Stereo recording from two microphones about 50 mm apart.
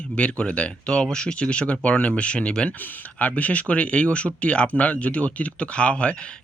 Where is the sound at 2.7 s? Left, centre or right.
Left.